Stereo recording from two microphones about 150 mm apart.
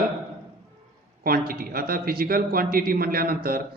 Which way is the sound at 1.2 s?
80° right.